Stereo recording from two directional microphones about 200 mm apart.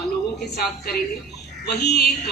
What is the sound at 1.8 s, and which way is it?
Speech, 55° left (ahead or behind).